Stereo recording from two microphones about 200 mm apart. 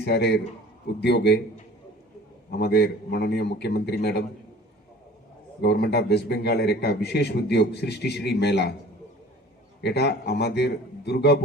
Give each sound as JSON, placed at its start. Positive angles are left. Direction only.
{"t": 0.0, "sound": "a man's voice", "side_deg": 55}
{"t": 2.5, "sound": "a man's voice", "side_deg": 55}
{"t": 5.6, "sound": "a man's voice", "side_deg": 55}
{"t": 9.8, "sound": "a man's voice", "side_deg": 55}